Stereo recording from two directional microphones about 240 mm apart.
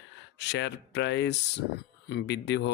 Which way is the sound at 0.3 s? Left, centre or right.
Left.